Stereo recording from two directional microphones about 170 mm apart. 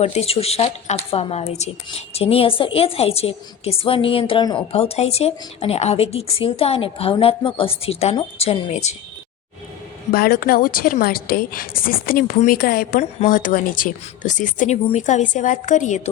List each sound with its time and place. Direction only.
0.0 s a woman's voice: 35° left (ahead or behind)
10.1 s a woman's voice: 60° left (ahead or behind)